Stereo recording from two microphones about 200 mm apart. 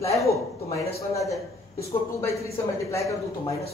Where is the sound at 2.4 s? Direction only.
15° left (ahead or behind).